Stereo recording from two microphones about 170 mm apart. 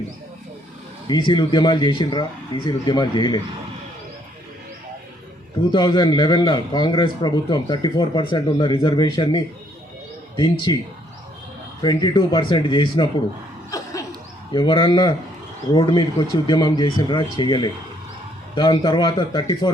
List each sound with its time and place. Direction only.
1.0 s a man's voice: 25° left (ahead or behind)
5.5 s a man's voice: 25° left (ahead or behind)
11.8 s a man's voice: 25° left (ahead or behind)
13.7 s a sound: 20° left (ahead or behind)
14.5 s a man's voice: 30° left (ahead or behind)